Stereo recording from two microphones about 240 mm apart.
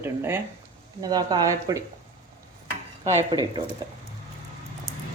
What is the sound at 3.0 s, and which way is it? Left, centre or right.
Speech, right.